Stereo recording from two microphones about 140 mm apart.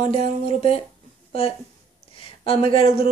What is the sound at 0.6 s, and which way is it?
Speech, 40° left (ahead or behind).